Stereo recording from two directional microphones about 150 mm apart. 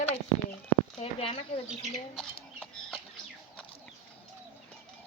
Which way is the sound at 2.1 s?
5° left (ahead or behind).